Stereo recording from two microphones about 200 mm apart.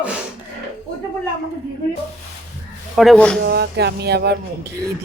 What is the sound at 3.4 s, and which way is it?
Speech, 55° right (ahead or behind).